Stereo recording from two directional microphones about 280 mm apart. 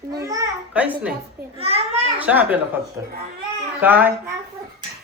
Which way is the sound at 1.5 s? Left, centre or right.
Right.